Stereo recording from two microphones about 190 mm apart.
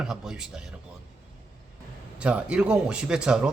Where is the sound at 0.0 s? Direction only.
5° right (ahead or behind).